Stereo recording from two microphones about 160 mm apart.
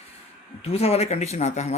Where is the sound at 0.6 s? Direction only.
40° left (ahead or behind).